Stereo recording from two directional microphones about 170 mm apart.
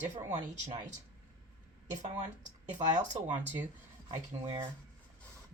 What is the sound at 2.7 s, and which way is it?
Speech, 45° right (ahead or behind).